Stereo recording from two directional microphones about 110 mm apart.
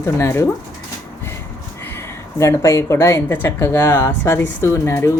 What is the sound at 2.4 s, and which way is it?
Speech, 25° left (ahead or behind).